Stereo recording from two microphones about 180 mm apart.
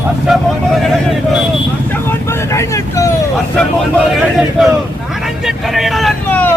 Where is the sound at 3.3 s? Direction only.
5° left (ahead or behind).